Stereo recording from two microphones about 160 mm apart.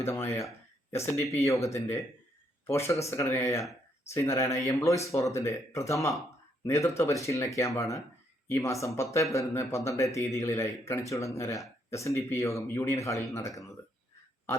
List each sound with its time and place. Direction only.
0.0 s speech: 15° left (ahead or behind)